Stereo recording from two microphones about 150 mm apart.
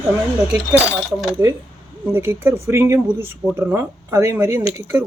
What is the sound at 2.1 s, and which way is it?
Speech, 15° right (ahead or behind).